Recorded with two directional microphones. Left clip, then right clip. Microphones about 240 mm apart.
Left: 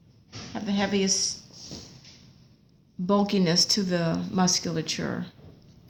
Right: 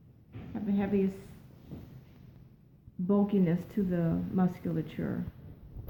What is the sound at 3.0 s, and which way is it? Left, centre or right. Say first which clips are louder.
Speech: left 5 dB; left.